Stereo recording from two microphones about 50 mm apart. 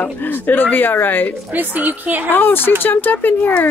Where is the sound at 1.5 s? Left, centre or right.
Right.